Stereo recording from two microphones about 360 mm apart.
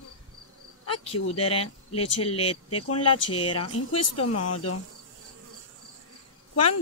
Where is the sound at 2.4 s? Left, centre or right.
Left.